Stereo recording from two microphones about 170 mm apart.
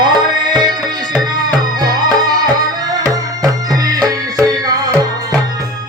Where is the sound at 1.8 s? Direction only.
25° right (ahead or behind).